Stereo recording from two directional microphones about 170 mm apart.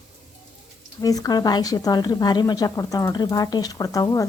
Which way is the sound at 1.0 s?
20° left (ahead or behind).